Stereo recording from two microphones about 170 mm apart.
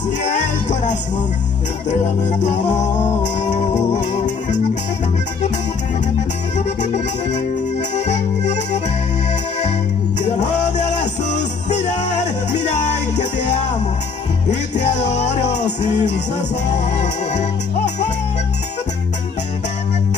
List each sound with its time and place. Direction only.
0.2 s music: 45° left (ahead or behind)
7.9 s accordion: 45° left (ahead or behind)
10.2 s music: 45° left (ahead or behind)
14.8 s music: 40° left (ahead or behind)